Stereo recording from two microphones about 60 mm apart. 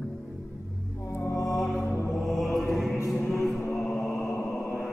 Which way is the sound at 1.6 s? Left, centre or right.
Centre.